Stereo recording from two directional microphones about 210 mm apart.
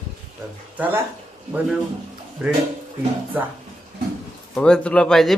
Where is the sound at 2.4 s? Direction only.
5° right (ahead or behind).